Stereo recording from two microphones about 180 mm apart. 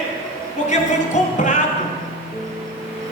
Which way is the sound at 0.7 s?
40° left (ahead or behind).